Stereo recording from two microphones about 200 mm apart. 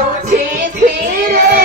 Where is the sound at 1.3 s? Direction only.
50° right (ahead or behind).